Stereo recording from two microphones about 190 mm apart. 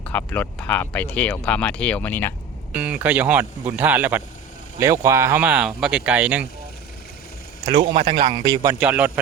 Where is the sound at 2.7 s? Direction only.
5° right (ahead or behind).